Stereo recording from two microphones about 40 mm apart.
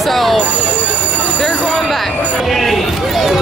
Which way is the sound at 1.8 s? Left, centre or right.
Centre.